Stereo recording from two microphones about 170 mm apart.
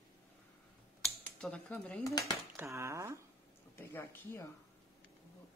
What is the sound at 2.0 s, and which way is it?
Speech, 20° left (ahead or behind).